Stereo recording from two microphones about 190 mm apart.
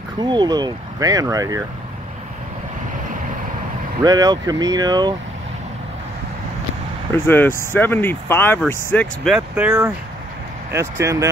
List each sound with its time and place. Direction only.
0.2 s speech: 20° right (ahead or behind)
4.0 s speech: 20° right (ahead or behind)
7.2 s speech: 10° left (ahead or behind)
9.6 s speech: 10° right (ahead or behind)